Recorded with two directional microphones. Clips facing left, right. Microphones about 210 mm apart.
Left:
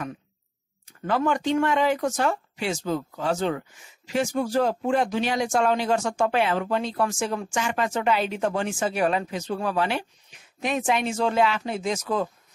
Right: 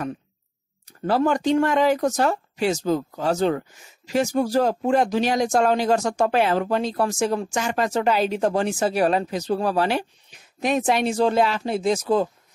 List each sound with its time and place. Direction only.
0.8 s speech: 35° right (ahead or behind)